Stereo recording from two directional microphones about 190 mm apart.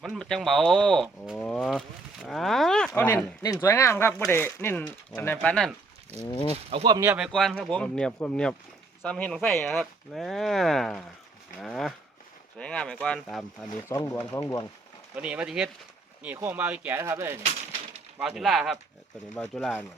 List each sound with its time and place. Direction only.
0.0 s speech: centre (ahead or behind)
6.2 s speech: 25° left (ahead or behind)
6.7 s speech: 25° right (ahead or behind)
7.0 s speech: 10° right (ahead or behind)
7.3 s speech: centre (ahead or behind)
13.8 s speech: 15° left (ahead or behind)
15.1 s speech: 5° right (ahead or behind)
18.2 s speech: 5° right (ahead or behind)